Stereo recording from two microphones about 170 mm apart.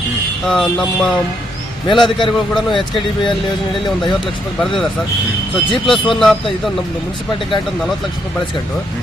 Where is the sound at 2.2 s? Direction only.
Centre (ahead or behind).